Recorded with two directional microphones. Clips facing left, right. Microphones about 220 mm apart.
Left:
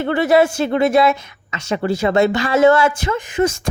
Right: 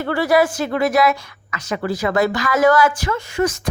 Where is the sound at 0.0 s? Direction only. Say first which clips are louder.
Left 2 dB; 20° left (ahead or behind).